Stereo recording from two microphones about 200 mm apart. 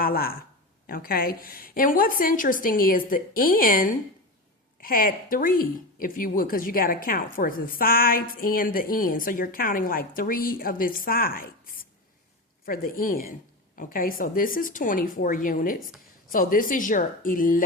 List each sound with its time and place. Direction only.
0.0 s speech: 50° left (ahead or behind)